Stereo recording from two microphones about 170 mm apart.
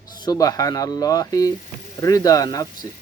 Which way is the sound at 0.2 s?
25° left (ahead or behind).